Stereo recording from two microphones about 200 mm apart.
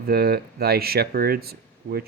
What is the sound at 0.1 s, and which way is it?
Speech, 50° right (ahead or behind).